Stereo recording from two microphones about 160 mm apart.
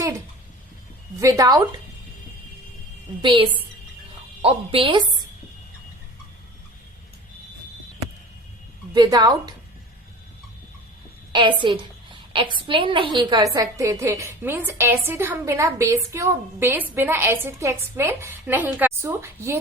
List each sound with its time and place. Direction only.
1.2 s speech: 20° right (ahead or behind)
3.2 s a woman's voice: 35° right (ahead or behind)
8.9 s speech: 25° right (ahead or behind)
11.3 s a woman's voice: 30° right (ahead or behind)